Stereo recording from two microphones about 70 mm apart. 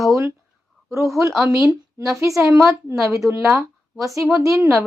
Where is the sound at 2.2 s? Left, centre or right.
Right.